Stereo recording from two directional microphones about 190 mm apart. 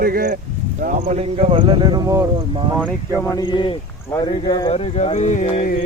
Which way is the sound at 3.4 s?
25° left (ahead or behind).